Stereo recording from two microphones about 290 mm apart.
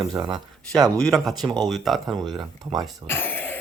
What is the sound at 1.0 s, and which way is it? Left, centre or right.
Speech, centre.